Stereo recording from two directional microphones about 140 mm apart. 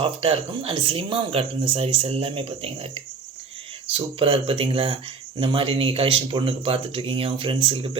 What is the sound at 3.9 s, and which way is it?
Speech, 40° right (ahead or behind).